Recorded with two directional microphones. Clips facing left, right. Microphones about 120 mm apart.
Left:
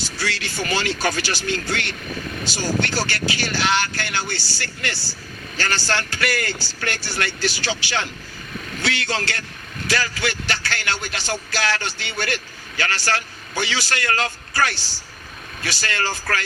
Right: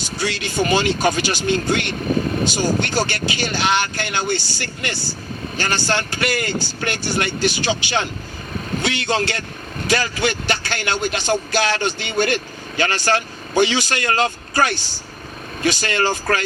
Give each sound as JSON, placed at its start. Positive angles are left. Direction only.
{"t": 0.0, "sound": "a man's voice", "side_deg": -20}
{"t": 2.0, "sound": "speech", "side_deg": -35}
{"t": 2.4, "sound": "a man's voice", "side_deg": -20}